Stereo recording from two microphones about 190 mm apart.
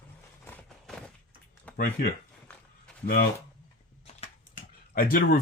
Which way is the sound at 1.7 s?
50° left (ahead or behind).